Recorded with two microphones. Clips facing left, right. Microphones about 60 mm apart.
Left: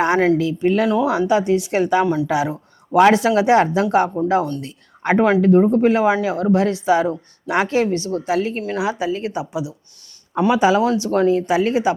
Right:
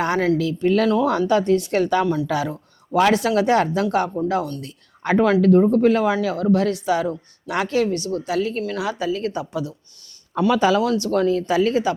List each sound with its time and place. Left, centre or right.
0.0 s speech: left
4.4 s speech: left